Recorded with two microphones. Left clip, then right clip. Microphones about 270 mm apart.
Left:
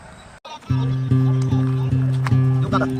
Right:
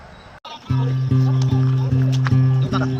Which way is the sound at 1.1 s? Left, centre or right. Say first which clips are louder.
Left 1 dB; centre.